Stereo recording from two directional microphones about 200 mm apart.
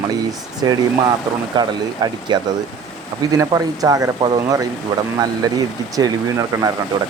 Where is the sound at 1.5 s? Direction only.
20° right (ahead or behind).